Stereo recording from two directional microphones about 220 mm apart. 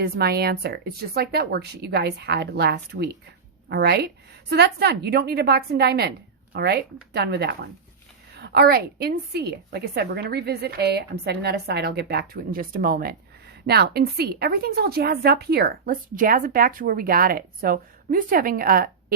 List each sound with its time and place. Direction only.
0.0 s a woman's voice: 45° right (ahead or behind)